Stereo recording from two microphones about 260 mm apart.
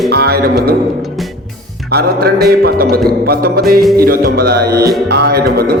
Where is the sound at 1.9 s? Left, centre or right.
Right.